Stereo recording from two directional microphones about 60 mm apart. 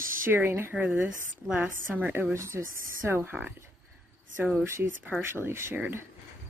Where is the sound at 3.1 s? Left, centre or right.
Right.